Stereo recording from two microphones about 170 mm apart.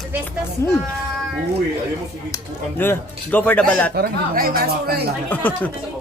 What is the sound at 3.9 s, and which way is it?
Speech, 60° right (ahead or behind).